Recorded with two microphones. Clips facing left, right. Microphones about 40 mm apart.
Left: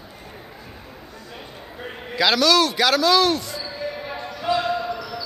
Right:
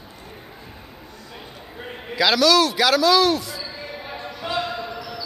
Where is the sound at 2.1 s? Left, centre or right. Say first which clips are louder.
Right 1 dB; centre.